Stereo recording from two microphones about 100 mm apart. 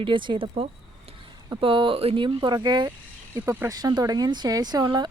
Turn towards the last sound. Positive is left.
turn(degrees=-45)  # may be behind; listen again after turning